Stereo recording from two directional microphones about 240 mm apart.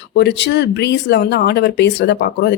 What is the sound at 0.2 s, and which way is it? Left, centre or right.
Speech, left.